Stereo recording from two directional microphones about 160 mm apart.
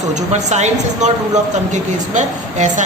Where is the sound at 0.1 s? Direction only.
45° right (ahead or behind).